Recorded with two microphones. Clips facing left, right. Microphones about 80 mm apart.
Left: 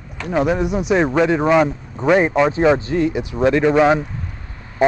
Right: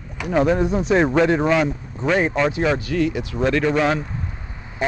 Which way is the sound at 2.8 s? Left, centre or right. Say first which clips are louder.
Left 2 dB; left.